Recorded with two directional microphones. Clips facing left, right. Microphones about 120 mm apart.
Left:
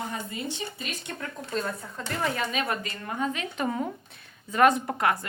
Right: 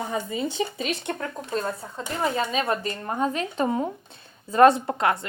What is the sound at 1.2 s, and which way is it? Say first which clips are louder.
A woman's voice: right 3 dB; 35° right (ahead or behind).